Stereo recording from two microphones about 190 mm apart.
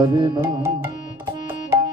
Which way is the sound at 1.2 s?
20° right (ahead or behind).